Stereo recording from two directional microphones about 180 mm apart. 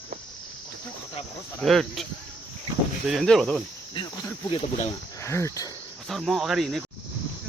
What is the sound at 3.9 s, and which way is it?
Speech, 25° left (ahead or behind).